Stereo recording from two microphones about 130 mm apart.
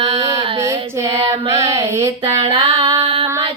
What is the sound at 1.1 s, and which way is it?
Child singing, 20° right (ahead or behind).